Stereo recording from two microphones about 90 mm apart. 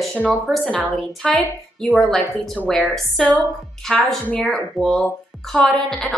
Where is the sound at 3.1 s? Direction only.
15° left (ahead or behind).